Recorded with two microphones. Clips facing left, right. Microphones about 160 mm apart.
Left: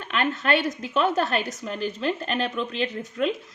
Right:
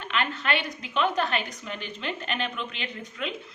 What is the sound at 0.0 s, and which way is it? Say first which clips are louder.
A woman's voice: left 4 dB; 45° left (ahead or behind).